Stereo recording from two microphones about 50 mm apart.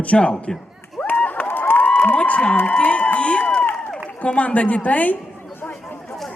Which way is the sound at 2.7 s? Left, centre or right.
Left.